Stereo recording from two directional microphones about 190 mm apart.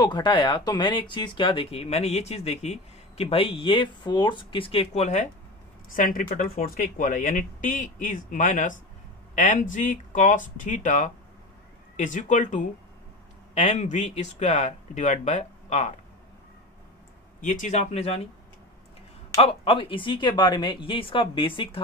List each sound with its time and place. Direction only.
0.0 s speech: 25° left (ahead or behind); by 15.9 s 40° left (ahead or behind)
17.4 s speech: 40° left (ahead or behind)
19.3 s speech: 30° left (ahead or behind)